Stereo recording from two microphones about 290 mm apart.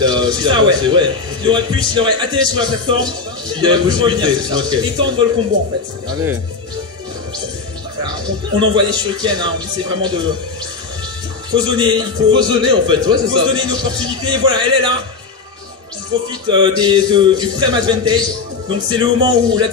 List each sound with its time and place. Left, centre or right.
0.0 s a man's voice: centre
8.5 s a man's voice: centre
11.5 s a man's voice: centre
16.3 s a man's voice: centre